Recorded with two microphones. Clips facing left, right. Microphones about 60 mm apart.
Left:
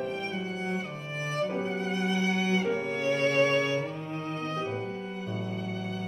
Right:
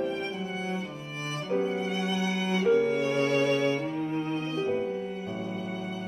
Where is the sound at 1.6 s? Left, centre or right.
Right.